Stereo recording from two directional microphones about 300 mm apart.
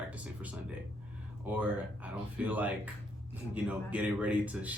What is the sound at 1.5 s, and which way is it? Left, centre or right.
Speech, centre.